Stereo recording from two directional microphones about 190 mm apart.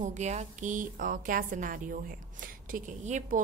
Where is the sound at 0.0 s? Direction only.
40° right (ahead or behind).